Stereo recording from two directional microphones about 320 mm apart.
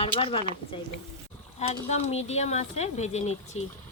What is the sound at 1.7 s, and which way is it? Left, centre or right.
Speech, centre.